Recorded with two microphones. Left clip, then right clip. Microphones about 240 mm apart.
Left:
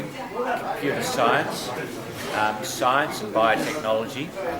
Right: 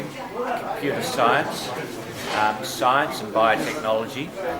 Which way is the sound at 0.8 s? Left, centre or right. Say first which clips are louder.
Right 2 dB; centre.